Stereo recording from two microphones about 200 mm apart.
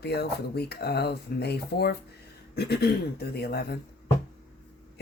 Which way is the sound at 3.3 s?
50° left (ahead or behind).